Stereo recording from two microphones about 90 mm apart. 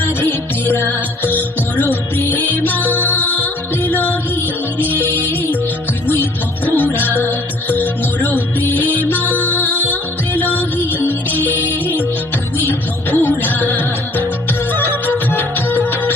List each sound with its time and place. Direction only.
0.0 s music: 25° left (ahead or behind)
6.7 s music: 20° left (ahead or behind)